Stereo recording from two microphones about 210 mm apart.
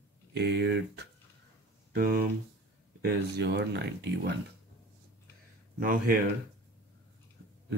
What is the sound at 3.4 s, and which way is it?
Speech, 55° right (ahead or behind).